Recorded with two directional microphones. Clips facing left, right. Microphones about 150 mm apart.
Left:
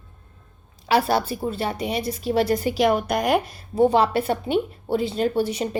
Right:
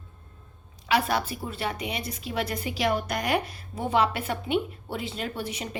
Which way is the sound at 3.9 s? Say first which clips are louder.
Left 3 dB; 35° left (ahead or behind).